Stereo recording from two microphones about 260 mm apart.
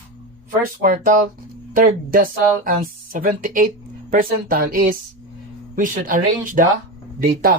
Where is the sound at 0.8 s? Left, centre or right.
Right.